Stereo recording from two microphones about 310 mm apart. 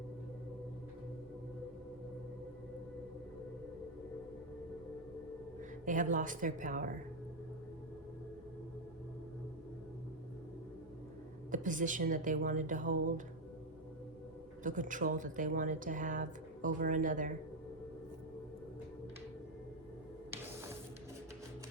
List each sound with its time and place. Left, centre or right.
5.8 s speech: right
11.5 s speech: right
14.6 s speech: right